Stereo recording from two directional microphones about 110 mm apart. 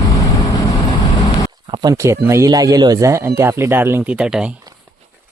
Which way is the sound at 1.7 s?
35° right (ahead or behind).